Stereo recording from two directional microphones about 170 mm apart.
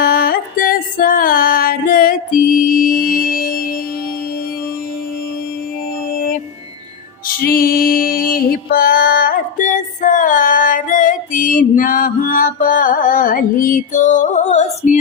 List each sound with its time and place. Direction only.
0.0 s music: 60° left (ahead or behind)
7.4 s music: 60° left (ahead or behind); by 14.9 s 45° left (ahead or behind)